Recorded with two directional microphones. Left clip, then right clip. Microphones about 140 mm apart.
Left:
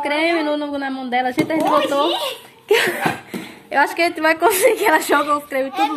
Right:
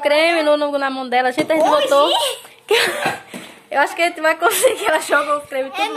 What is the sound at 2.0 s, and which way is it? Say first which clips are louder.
Speech: right 4 dB; 90° right.